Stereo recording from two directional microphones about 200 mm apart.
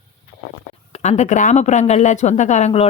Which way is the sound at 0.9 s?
35° left (ahead or behind).